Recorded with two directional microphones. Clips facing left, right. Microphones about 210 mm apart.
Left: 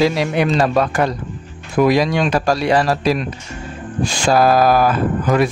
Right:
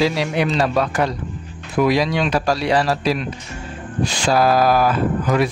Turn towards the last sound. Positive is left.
turn(degrees=50)  # may be behind; listen again after turning